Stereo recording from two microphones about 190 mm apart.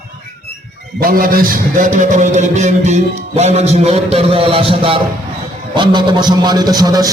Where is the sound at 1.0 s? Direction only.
50° right (ahead or behind).